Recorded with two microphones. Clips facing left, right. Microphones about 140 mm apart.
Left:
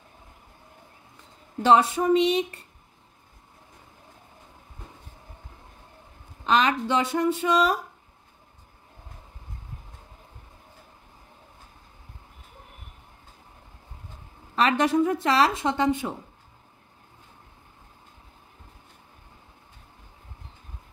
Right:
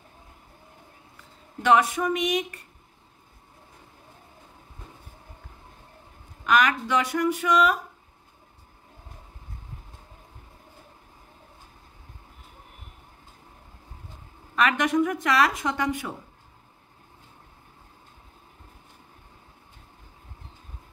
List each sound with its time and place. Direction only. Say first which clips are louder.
1.6 s speech: left 2 dB; 30° left (ahead or behind)
6.4 s speech: even; 25° left (ahead or behind)
14.5 s speech: left 1 dB; 30° left (ahead or behind)